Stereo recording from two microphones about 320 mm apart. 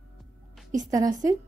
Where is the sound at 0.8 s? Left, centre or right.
Centre.